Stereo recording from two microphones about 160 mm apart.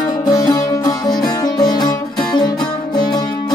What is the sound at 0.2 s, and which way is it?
Music, 20° left (ahead or behind).